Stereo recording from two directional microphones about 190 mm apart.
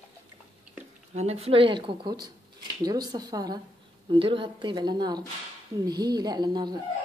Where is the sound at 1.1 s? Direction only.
35° right (ahead or behind).